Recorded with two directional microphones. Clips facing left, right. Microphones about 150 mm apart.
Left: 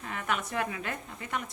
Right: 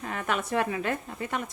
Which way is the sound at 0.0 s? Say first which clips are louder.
Right 3 dB; 40° right (ahead or behind).